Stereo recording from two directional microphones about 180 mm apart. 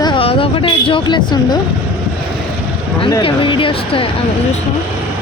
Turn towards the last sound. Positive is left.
turn(degrees=30)  # may be behind; listen again after turning